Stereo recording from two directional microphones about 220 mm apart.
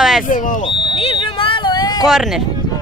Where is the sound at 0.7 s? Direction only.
25° left (ahead or behind).